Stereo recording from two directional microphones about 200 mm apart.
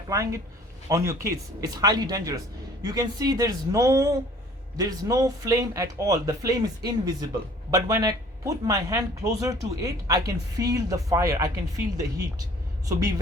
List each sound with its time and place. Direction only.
0.1 s speech: 15° right (ahead or behind)
12.8 s speech: 15° right (ahead or behind)